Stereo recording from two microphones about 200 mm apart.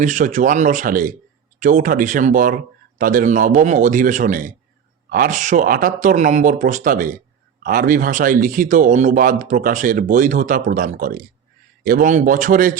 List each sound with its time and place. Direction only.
0.0 s a man's voice: 40° right (ahead or behind)